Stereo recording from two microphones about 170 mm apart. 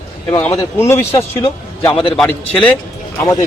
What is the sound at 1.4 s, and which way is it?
Speech, 25° left (ahead or behind).